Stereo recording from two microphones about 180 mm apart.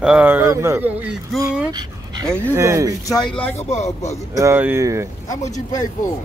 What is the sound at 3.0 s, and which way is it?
Speech, 25° left (ahead or behind).